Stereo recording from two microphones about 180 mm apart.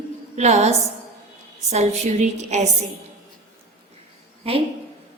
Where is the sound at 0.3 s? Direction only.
40° right (ahead or behind).